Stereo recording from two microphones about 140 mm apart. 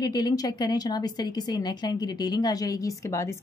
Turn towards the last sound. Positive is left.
turn(degrees=20)  # may be behind; listen again after turning